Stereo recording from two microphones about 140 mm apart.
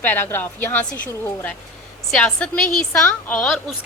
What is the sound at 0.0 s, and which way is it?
A woman's voice, 15° left (ahead or behind).